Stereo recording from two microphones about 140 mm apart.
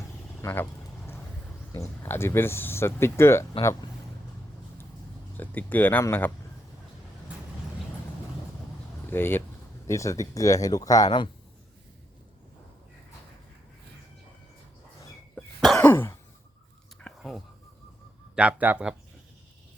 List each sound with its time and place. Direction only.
0.4 s a sound: 15° left (ahead or behind)
1.7 s speech: 15° left (ahead or behind)
5.4 s speech: 10° left (ahead or behind)
9.0 s speech: 15° left (ahead or behind)
15.4 s cough: 5° left (ahead or behind)
15.8 s throat clearing: 15° left (ahead or behind)
17.2 s a sound: centre (ahead or behind)
18.3 s speech: 10° right (ahead or behind)